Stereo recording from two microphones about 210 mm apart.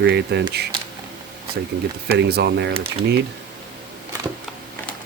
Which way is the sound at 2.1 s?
50° right (ahead or behind).